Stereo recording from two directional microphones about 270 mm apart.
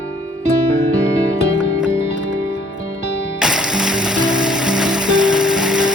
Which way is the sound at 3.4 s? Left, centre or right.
Centre.